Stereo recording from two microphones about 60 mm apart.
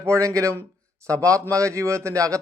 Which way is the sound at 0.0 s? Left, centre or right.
Right.